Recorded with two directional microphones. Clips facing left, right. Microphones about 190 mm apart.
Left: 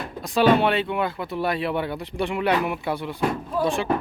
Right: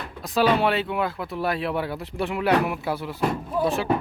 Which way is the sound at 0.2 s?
Centre (ahead or behind).